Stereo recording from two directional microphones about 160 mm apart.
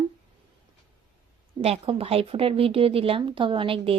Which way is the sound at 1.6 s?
40° right (ahead or behind).